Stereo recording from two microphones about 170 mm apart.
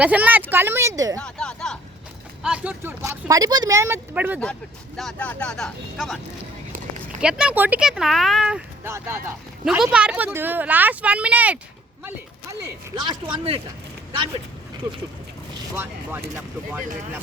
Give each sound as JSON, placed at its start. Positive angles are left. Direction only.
{"t": 0.0, "sound": "speech", "side_deg": -10}
{"t": 1.2, "sound": "speech", "side_deg": 5}
{"t": 2.4, "sound": "speech", "side_deg": -5}
{"t": 4.9, "sound": "speech", "side_deg": 5}
{"t": 7.2, "sound": "speech", "side_deg": -5}
{"t": 9.6, "sound": "speech", "side_deg": -5}
{"t": 13.3, "sound": "speech", "side_deg": -35}
{"t": 15.7, "sound": "speech", "side_deg": -15}